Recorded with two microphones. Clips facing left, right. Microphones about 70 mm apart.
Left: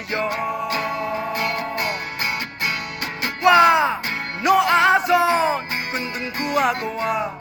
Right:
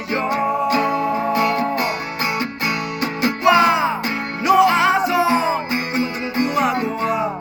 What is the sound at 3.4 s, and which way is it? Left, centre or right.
Music, left.